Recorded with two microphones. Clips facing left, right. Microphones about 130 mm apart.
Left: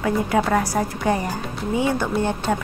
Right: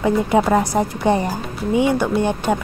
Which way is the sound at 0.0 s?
20° right (ahead or behind).